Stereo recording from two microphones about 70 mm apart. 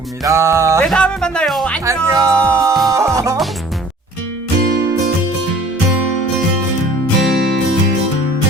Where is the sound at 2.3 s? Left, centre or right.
Centre.